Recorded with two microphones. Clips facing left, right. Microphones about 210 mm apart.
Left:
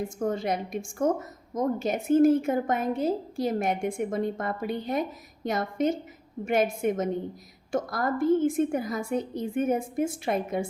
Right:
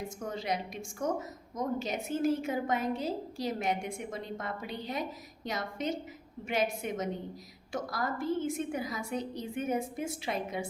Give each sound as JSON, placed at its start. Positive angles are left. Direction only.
{"t": 0.2, "sound": "a woman's voice", "side_deg": 50}